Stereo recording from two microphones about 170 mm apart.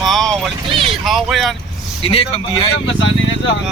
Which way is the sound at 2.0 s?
35° left (ahead or behind).